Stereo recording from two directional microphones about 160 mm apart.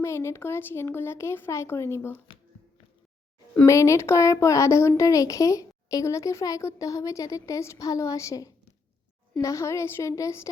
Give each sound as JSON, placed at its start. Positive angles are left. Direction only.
{"t": 0.0, "sound": "speech", "side_deg": 15}
{"t": 3.5, "sound": "speech", "side_deg": 15}